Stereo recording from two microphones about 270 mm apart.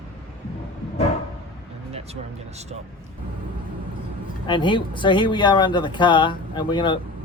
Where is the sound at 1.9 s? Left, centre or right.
Right.